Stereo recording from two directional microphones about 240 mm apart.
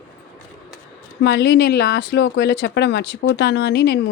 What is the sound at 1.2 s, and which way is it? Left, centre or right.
Speech, left.